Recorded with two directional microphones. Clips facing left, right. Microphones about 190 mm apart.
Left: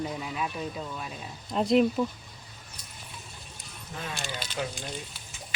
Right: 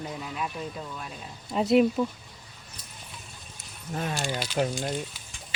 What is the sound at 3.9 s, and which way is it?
Speech, 45° right (ahead or behind).